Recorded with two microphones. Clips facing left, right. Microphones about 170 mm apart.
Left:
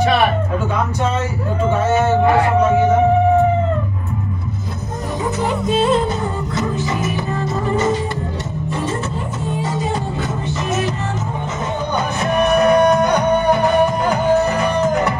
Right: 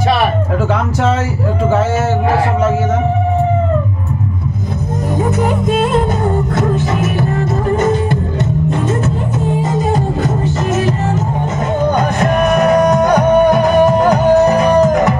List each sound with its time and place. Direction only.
5.4 s music: 50° right (ahead or behind)
9.6 s music: 45° right (ahead or behind)
12.2 s music: 40° right (ahead or behind)